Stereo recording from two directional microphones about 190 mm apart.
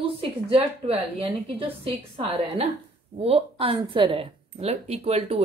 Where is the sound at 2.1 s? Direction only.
30° right (ahead or behind).